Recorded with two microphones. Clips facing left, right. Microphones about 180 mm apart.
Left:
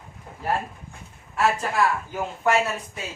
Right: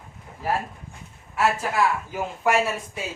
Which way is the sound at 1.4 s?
5° right (ahead or behind).